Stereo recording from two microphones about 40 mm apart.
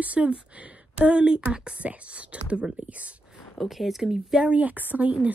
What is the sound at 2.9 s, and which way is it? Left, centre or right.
Speech, right.